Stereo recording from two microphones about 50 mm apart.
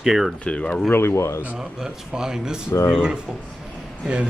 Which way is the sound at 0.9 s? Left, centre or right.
Left.